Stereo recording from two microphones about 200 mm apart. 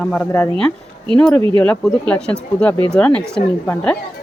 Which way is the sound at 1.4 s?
25° right (ahead or behind).